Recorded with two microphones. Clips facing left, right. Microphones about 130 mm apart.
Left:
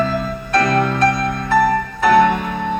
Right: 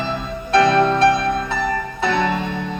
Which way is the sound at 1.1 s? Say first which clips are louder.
Left 4 dB; 55° left (ahead or behind).